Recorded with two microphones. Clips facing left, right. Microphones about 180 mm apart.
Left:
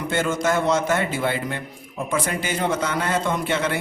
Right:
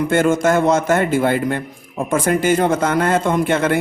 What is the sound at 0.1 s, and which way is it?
A man's voice, 50° right (ahead or behind).